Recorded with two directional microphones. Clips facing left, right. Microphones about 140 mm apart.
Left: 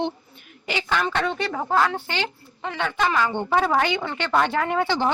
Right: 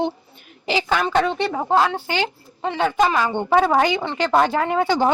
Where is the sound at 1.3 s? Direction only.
25° right (ahead or behind).